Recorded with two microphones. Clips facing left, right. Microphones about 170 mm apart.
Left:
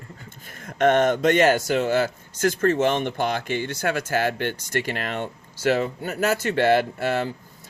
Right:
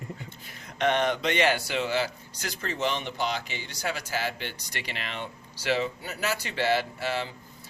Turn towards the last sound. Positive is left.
turn(degrees=50)  # may be behind; listen again after turning